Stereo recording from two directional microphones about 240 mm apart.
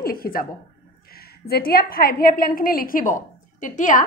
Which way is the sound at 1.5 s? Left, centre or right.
Left.